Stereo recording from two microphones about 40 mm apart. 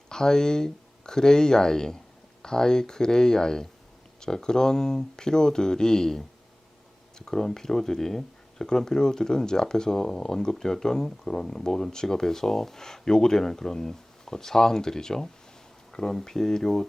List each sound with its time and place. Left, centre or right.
0.1 s speech: centre